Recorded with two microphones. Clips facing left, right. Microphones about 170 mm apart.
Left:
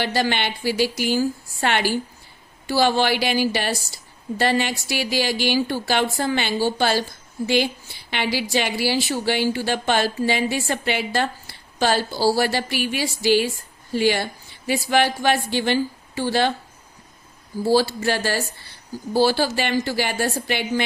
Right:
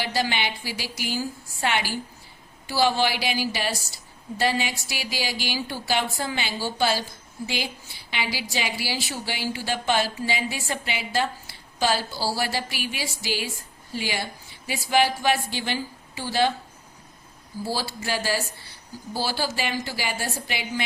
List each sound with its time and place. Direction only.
0.0 s a woman's voice: 60° left (ahead or behind)
17.7 s a woman's voice: 65° left (ahead or behind)